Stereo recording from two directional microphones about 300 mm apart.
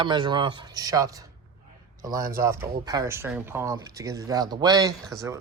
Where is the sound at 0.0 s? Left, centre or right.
Centre.